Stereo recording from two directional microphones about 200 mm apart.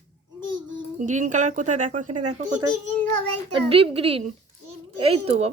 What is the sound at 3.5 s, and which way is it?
Speech, 30° right (ahead or behind).